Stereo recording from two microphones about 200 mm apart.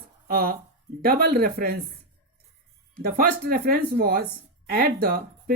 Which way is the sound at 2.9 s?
50° right (ahead or behind).